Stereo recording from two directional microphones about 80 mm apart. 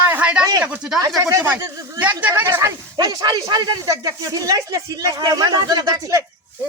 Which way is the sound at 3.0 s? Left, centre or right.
Right.